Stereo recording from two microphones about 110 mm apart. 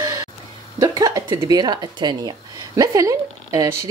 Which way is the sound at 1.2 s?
40° right (ahead or behind).